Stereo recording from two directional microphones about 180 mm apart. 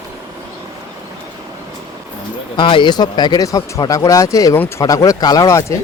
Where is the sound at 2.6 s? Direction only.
25° left (ahead or behind).